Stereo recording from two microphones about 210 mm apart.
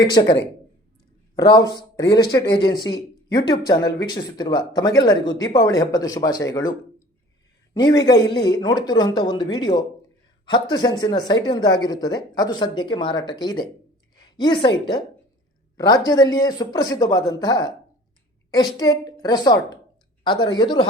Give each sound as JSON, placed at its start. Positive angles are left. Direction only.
{"t": 0.1, "sound": "speech", "side_deg": 20}
{"t": 1.4, "sound": "speech", "side_deg": 15}
{"t": 15.8, "sound": "speech", "side_deg": 20}